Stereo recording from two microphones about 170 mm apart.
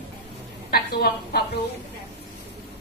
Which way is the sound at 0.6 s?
65° left (ahead or behind).